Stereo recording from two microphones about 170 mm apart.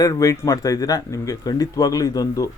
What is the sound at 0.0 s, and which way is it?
Speech, 20° left (ahead or behind).